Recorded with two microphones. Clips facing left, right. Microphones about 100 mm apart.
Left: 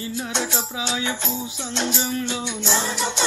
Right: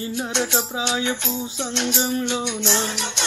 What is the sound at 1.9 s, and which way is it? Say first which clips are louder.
Music: right 3 dB; 25° right (ahead or behind).